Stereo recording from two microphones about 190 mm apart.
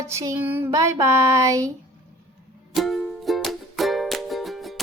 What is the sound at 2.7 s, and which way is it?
Music, centre (ahead or behind).